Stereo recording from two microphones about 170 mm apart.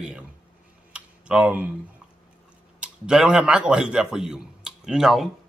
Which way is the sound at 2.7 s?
5° right (ahead or behind).